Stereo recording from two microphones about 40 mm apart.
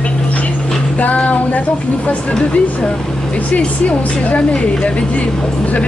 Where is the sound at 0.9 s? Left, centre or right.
Left.